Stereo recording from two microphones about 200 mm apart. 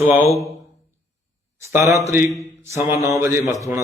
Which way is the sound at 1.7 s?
15° right (ahead or behind).